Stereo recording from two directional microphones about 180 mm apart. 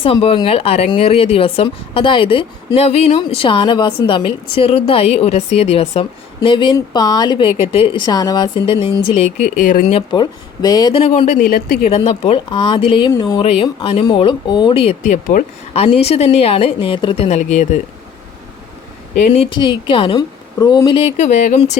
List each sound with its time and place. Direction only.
0.0 s speech: 30° left (ahead or behind); by 10.0 s 45° left (ahead or behind)
10.1 s a woman's voice: 25° left (ahead or behind)
11.0 s speech: 35° left (ahead or behind)
11.9 s speech: 35° left (ahead or behind)
15.7 s speech: 35° left (ahead or behind)
19.1 s a woman's voice: 40° left (ahead or behind)